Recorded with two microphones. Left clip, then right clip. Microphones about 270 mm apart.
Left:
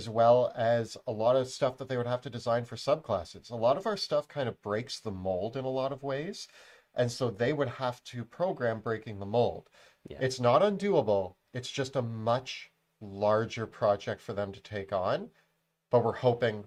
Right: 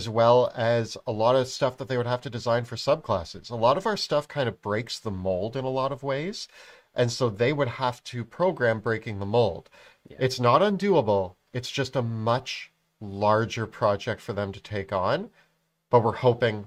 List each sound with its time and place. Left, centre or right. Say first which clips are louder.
0.0 s speech: right 4 dB; right